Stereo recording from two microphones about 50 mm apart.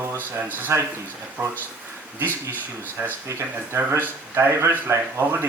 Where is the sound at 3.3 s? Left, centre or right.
Right.